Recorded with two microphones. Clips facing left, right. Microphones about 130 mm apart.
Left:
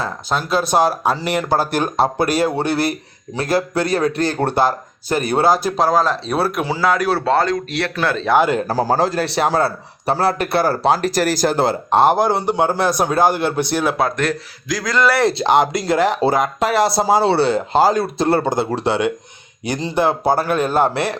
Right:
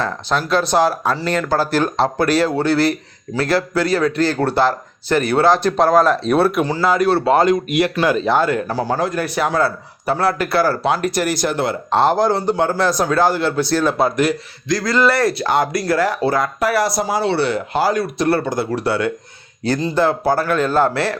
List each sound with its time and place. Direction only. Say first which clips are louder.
0.0 s a man's voice: right 2 dB; 10° left (ahead or behind)
7.3 s speech: right 3 dB; 20° right (ahead or behind)
8.4 s speech: left 2 dB; 20° left (ahead or behind)
8.6 s a man's voice: left 3 dB; 40° left (ahead or behind)
11.9 s speech: even; 15° left (ahead or behind)
13.9 s a man's voice: right 2 dB; centre (ahead or behind)
15.2 s speech: left 2 dB; 25° left (ahead or behind)